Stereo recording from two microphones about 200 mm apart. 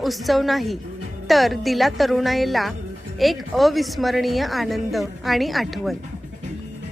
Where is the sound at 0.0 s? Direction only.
Centre (ahead or behind).